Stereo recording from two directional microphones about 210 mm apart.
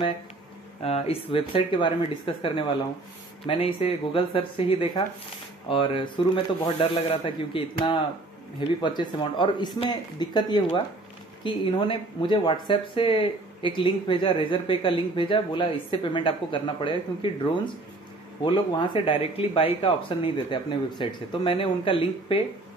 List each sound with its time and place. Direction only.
0.8 s speech: 30° left (ahead or behind)
18.4 s speech: 20° left (ahead or behind)